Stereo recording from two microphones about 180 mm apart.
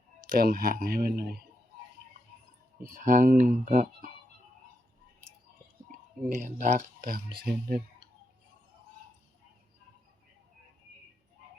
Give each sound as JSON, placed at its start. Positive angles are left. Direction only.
{"t": 0.3, "sound": "speech", "side_deg": -55}
{"t": 2.9, "sound": "speech", "side_deg": -45}
{"t": 6.2, "sound": "speech", "side_deg": -45}
{"t": 7.3, "sound": "speech", "side_deg": -60}